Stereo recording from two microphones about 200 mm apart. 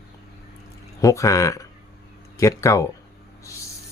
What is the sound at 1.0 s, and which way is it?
Speech, 15° left (ahead or behind).